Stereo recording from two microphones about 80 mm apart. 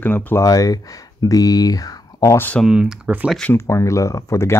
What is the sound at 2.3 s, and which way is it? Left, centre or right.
Speech, left.